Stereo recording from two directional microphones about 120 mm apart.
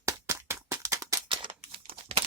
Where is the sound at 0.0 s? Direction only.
25° right (ahead or behind).